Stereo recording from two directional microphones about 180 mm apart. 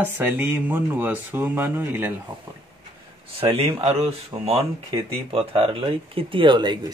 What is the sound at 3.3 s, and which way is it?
Speech, 30° right (ahead or behind).